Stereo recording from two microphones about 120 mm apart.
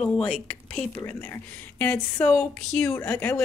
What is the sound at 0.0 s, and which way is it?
Speech, 10° left (ahead or behind).